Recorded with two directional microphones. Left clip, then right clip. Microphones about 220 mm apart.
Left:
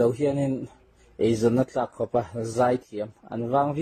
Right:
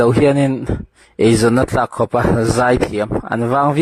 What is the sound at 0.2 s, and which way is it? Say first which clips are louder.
Speech: right 11 dB; 50° right (ahead or behind).